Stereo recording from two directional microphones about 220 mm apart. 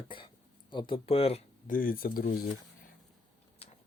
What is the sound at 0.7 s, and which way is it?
Speech, 20° left (ahead or behind).